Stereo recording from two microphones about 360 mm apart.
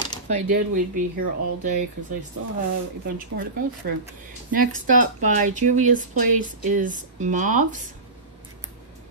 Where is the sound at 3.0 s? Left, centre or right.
Right.